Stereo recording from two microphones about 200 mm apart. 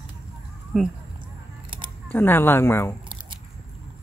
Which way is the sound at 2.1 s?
10° left (ahead or behind).